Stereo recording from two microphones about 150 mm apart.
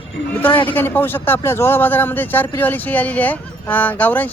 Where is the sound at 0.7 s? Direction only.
15° left (ahead or behind).